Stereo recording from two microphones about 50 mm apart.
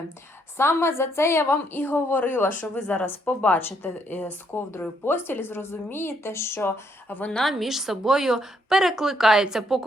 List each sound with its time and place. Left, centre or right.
0.5 s a woman's voice: left
1.5 s a woman's voice: left
2.7 s speech: left
3.1 s a woman's voice: left
5.0 s speech: left
7.5 s a woman's voice: centre